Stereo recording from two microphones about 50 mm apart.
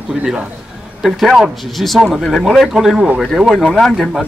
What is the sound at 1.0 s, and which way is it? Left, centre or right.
A man's voice, centre.